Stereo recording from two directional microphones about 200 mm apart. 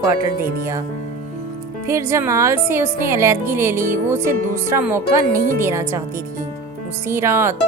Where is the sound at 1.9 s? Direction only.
15° right (ahead or behind).